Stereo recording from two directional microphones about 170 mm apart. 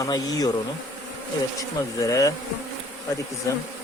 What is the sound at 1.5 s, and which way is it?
Speech, 20° left (ahead or behind).